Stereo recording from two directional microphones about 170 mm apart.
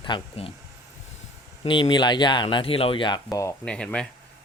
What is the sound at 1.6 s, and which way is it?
Speech, 30° left (ahead or behind).